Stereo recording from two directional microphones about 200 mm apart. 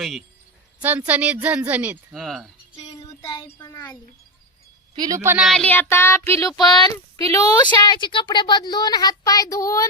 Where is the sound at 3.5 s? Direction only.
15° left (ahead or behind).